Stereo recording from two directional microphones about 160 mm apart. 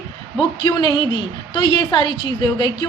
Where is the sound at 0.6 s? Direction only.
30° left (ahead or behind).